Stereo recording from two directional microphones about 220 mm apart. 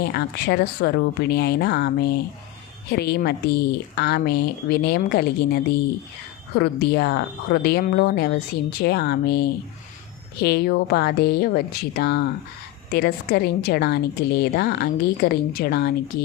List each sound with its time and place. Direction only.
0.0 s a woman's voice: 50° left (ahead or behind)
6.6 s a woman's voice: 50° left (ahead or behind)